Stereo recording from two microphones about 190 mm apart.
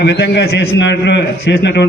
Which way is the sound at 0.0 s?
65° left (ahead or behind).